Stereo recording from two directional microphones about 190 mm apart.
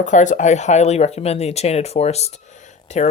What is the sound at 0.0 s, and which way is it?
Speech, 40° left (ahead or behind).